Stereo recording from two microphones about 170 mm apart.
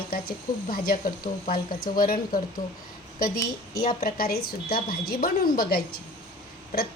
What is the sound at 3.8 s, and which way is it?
A woman's voice, 60° left (ahead or behind).